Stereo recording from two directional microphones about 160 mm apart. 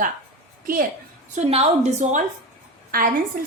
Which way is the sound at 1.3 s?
40° right (ahead or behind).